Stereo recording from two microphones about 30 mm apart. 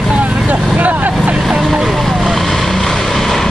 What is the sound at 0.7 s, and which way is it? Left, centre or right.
Vehicle, right.